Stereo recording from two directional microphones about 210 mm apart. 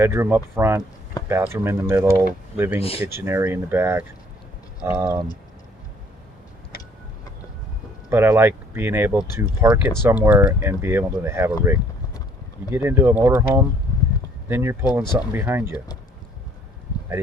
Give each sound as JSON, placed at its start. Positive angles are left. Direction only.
{"t": 0.0, "sound": "speech", "side_deg": -10}
{"t": 2.8, "sound": "speech", "side_deg": 25}
{"t": 3.1, "sound": "speech", "side_deg": -10}
{"t": 6.7, "sound": "vehicle", "side_deg": 45}
{"t": 8.1, "sound": "speech", "side_deg": -10}
{"t": 11.6, "sound": "vehicle", "side_deg": -10}
{"t": 12.7, "sound": "speech", "side_deg": -10}